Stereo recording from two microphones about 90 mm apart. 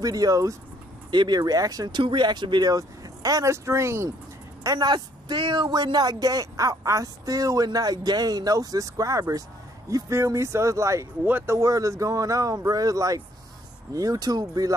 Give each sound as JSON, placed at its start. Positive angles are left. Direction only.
{"t": 0.0, "sound": "speech", "side_deg": -45}
{"t": 1.1, "sound": "speech", "side_deg": -55}
{"t": 4.6, "sound": "speech", "side_deg": -50}
{"t": 11.2, "sound": "speech", "side_deg": -20}
{"t": 11.5, "sound": "speech", "side_deg": -40}